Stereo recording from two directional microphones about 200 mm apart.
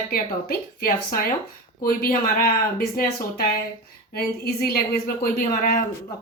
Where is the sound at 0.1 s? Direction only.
45° left (ahead or behind).